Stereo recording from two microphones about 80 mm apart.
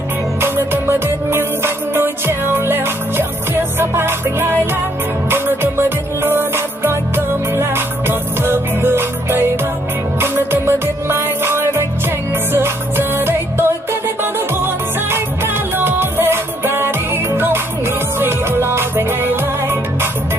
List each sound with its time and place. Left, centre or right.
0.4 s music: right